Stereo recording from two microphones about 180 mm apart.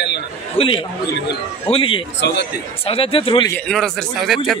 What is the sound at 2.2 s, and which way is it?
Speech, 70° left (ahead or behind).